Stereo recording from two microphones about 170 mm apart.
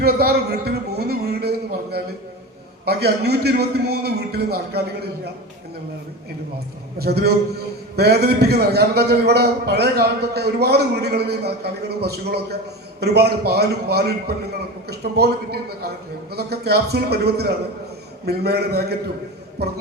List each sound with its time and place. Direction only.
0.0 s a man's voice: 65° right (ahead or behind)
7.0 s a man's voice: 70° right (ahead or behind)